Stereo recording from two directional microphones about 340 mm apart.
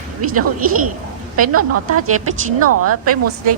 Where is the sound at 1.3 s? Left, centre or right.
Right.